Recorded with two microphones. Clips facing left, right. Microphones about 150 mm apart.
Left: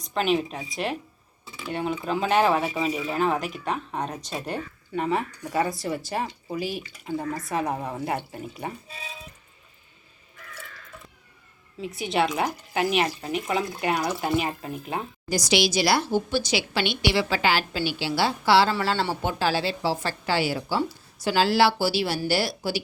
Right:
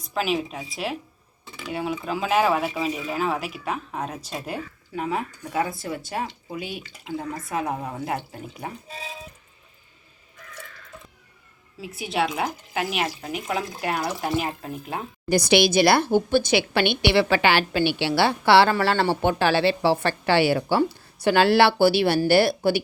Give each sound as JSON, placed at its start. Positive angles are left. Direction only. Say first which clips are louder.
{"t": 0.0, "sound": "speech", "louder": "left 1 dB", "side_deg": -5}
{"t": 11.8, "sound": "speech", "louder": "left 1 dB", "side_deg": 0}
{"t": 15.3, "sound": "a woman's voice", "louder": "right 5 dB", "side_deg": -55}